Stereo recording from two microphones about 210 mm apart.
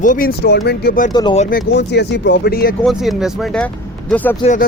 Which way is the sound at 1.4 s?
45° left (ahead or behind).